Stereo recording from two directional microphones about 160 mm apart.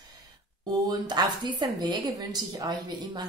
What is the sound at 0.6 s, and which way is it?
A woman's voice, 25° right (ahead or behind).